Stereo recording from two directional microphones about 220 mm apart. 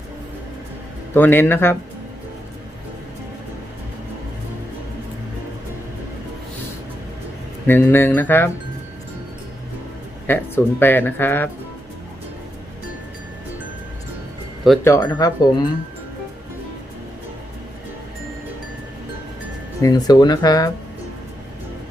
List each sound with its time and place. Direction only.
1.1 s speech: 10° left (ahead or behind)
7.7 s speech: 10° left (ahead or behind)
10.2 s speech: 10° left (ahead or behind)
14.8 s speech: 15° left (ahead or behind)
19.8 s speech: 15° left (ahead or behind)